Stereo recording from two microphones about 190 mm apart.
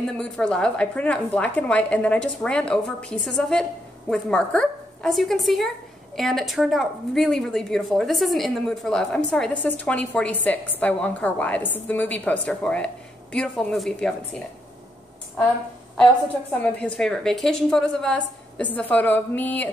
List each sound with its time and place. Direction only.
0.2 s a woman's voice: 5° left (ahead or behind)
16.5 s a woman's voice: 5° left (ahead or behind)